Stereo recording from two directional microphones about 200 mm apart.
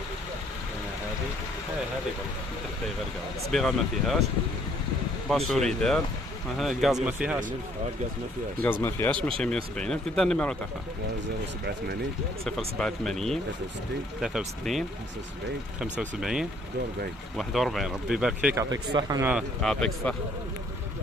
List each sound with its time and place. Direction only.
3.5 s speech: centre (ahead or behind)
5.3 s speech: centre (ahead or behind)
8.8 s speech: 10° left (ahead or behind)
12.4 s speech: 5° left (ahead or behind)
18.7 s speech: 20° right (ahead or behind)
19.2 s speech: centre (ahead or behind)